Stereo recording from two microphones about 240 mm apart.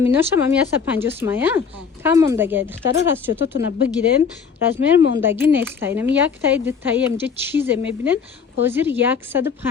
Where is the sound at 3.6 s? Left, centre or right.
Left.